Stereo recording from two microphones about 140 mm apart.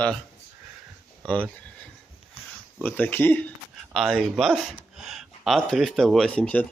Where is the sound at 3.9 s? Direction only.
Centre (ahead or behind).